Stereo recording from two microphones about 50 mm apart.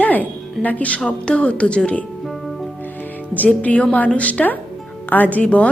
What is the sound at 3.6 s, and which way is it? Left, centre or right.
A woman's voice, left.